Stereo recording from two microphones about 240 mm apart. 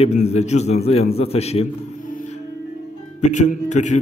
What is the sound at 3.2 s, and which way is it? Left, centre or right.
Speech, left.